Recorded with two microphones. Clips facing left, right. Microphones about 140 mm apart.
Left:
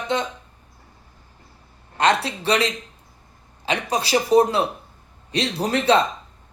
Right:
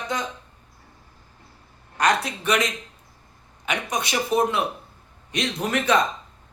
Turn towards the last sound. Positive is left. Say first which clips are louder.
# left 3 dB
turn(degrees=30)  # may be behind; listen again after turning